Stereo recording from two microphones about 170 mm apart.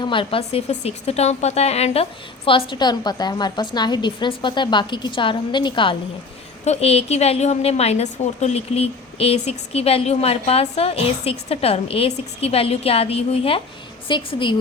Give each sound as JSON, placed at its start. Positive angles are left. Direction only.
{"t": 0.0, "sound": "a woman's voice", "side_deg": 30}